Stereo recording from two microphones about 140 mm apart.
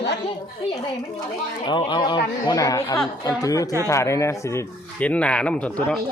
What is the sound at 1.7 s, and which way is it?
Speech, 35° left (ahead or behind).